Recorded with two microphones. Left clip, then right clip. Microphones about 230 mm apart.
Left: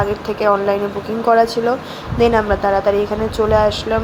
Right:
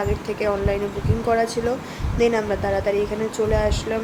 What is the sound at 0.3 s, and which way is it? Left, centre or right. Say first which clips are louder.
A woman's voice: left 9 dB; centre.